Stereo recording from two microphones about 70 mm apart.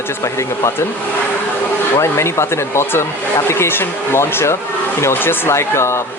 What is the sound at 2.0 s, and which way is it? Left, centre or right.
Speech, left.